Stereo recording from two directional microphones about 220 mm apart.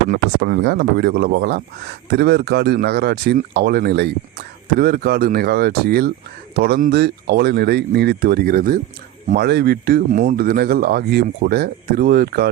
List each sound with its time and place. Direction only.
0.1 s speech: 45° right (ahead or behind)